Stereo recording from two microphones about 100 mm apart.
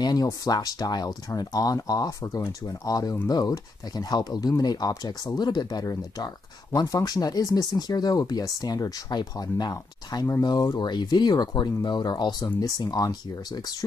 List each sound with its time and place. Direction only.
0.0 s speech: 40° left (ahead or behind)